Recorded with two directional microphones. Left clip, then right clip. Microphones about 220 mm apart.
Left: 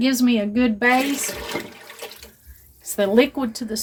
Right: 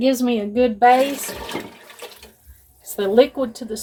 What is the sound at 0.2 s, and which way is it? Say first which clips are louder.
Speech: right 2 dB; 50° left (ahead or behind).